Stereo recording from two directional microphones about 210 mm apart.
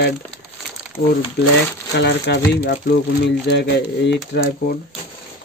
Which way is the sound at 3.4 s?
55° left (ahead or behind).